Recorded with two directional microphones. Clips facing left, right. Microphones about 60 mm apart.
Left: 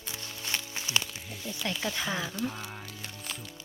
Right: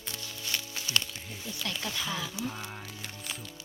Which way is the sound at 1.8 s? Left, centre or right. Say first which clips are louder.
Left 3 dB; left.